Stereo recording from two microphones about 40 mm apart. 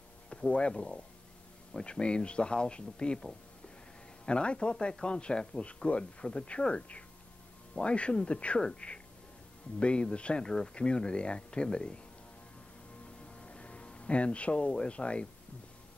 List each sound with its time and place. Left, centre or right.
0.3 s speech: left
4.3 s speech: left
13.4 s speech: left